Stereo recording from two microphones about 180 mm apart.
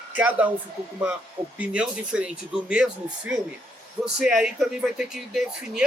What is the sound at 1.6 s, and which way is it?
Speech, 5° right (ahead or behind).